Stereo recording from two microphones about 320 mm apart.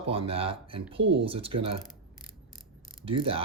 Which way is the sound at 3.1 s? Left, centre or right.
Centre.